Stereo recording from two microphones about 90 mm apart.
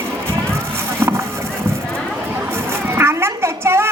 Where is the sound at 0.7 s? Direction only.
30° right (ahead or behind).